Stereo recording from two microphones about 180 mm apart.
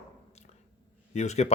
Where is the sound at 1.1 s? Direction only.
40° left (ahead or behind).